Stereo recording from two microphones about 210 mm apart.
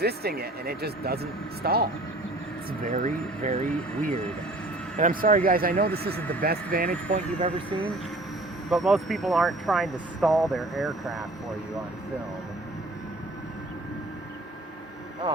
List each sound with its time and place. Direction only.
0.0 s speech: 50° right (ahead or behind)
8.7 s speech: centre (ahead or behind)